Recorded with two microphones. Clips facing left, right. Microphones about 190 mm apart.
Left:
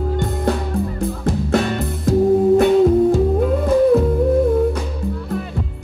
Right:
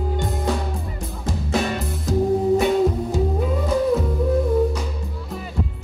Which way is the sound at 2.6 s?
55° left (ahead or behind).